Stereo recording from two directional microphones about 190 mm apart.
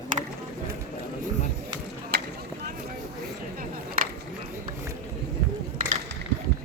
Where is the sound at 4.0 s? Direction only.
45° right (ahead or behind).